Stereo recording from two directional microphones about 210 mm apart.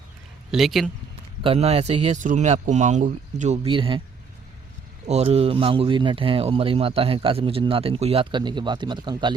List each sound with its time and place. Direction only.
0.5 s a man's voice: centre (ahead or behind)
1.5 s speech: 30° right (ahead or behind)
5.0 s speech: 30° right (ahead or behind)